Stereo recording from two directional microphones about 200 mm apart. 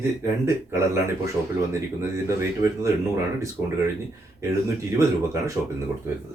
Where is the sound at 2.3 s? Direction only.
15° right (ahead or behind).